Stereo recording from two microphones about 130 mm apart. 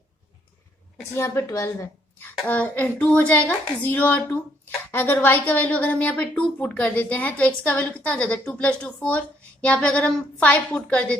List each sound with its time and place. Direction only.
1.1 s a woman's voice: 20° left (ahead or behind)
2.5 s a woman's voice: 10° left (ahead or behind)